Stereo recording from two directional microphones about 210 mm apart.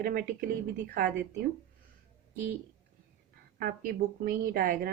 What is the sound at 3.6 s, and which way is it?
A woman's voice, 45° right (ahead or behind).